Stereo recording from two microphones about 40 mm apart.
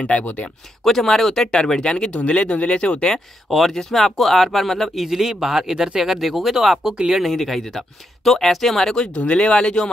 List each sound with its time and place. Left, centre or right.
0.2 s speech: left
0.8 s speech: centre; by 3.2 s left
3.4 s speech: centre
5.0 s speech: centre
6.1 s speech: centre
7.2 s speech: centre
9.1 s speech: left